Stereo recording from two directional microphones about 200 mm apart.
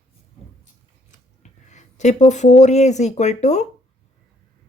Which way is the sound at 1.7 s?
35° left (ahead or behind).